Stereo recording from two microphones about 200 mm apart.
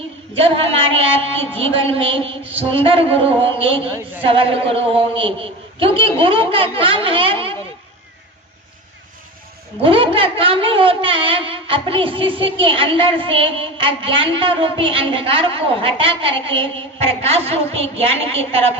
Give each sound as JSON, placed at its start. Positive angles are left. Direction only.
{"t": 0.3, "sound": "a woman's voice", "side_deg": -30}
{"t": 9.8, "sound": "a woman's voice", "side_deg": -30}